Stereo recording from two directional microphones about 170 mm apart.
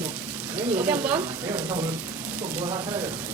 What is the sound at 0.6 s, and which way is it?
Frying, 10° right (ahead or behind).